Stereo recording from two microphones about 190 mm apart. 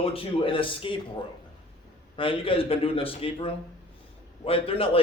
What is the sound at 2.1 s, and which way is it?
A man's voice, 30° left (ahead or behind).